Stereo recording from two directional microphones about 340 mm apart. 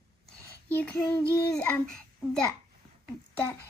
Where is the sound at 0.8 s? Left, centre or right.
Centre.